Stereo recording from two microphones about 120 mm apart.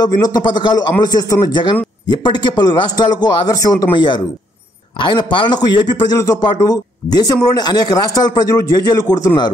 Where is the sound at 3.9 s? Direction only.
40° left (ahead or behind).